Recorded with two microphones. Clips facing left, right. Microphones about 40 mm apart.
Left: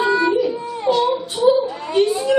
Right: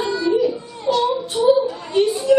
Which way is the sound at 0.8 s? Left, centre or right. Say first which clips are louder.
Left 1 dB; centre.